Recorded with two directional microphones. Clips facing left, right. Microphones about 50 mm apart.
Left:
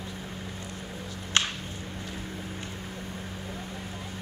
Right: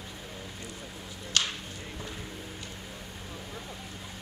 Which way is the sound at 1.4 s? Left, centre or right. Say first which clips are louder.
Left 3 dB; left.